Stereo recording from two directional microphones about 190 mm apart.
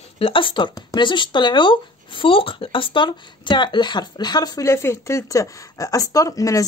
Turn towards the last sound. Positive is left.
turn(degrees=20)  # may be behind; listen again after turning